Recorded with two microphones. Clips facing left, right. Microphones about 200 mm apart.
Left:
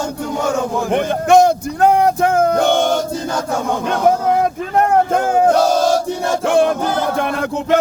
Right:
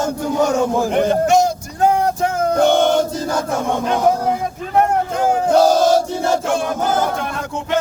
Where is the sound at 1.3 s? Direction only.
60° left (ahead or behind).